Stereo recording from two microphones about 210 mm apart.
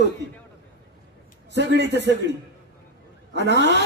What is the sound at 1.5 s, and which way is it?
Speech, 55° right (ahead or behind).